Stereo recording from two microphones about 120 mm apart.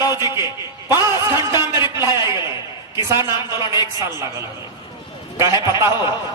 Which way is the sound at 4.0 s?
25° right (ahead or behind).